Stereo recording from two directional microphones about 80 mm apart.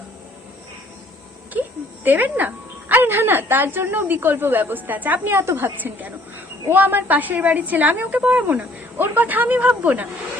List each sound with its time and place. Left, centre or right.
2.0 s a woman's voice: right